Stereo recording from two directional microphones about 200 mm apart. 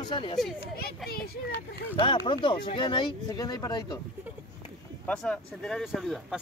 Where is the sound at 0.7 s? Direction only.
50° left (ahead or behind).